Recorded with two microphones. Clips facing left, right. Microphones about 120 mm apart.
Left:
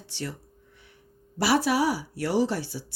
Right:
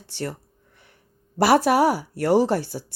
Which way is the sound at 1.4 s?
50° right (ahead or behind).